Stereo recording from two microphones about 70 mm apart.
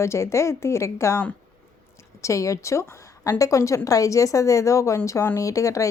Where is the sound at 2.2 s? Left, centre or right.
Left.